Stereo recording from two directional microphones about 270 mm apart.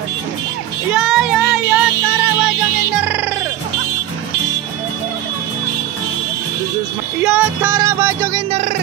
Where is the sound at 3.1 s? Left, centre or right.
Centre.